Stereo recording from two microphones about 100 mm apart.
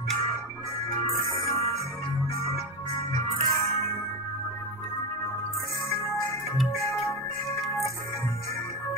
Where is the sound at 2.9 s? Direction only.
30° left (ahead or behind).